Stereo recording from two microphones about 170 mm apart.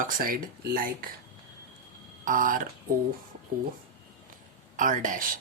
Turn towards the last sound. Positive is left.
turn(degrees=-55)  # may be behind; listen again after turning